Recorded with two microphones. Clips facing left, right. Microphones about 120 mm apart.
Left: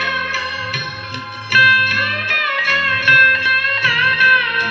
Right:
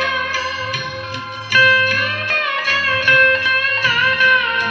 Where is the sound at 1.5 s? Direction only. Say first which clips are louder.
Even; 30° right (ahead or behind).